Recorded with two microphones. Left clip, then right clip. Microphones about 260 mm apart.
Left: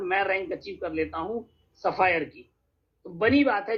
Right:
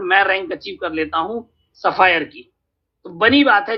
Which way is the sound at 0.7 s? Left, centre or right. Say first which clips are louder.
Right 10 dB; right.